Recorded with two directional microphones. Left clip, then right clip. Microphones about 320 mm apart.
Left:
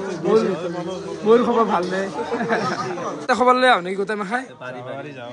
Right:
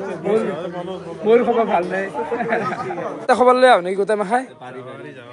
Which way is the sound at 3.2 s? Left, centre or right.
Centre.